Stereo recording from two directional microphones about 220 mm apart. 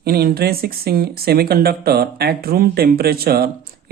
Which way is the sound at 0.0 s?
45° right (ahead or behind).